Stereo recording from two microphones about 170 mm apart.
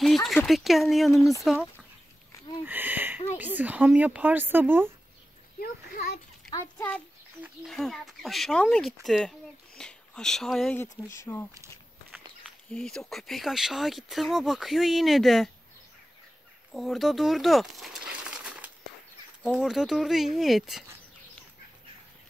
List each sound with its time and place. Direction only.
0.0 s a sound: centre (ahead or behind)
0.5 s speech: centre (ahead or behind)
2.6 s a sound: 10° right (ahead or behind)
3.3 s speech: 10° right (ahead or behind)
5.6 s a child's voice: 65° left (ahead or behind)
6.5 s speech: 15° left (ahead or behind)
7.6 s speech: centre (ahead or behind)
11.1 s speech: 15° left (ahead or behind)
12.4 s speech: centre (ahead or behind)
16.7 s speech: centre (ahead or behind)